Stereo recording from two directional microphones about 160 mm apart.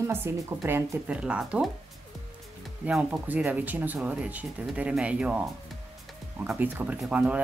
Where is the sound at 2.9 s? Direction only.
5° right (ahead or behind).